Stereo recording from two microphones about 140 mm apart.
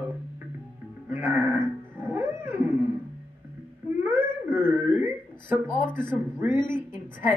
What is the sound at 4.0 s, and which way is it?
Wail, 15° right (ahead or behind).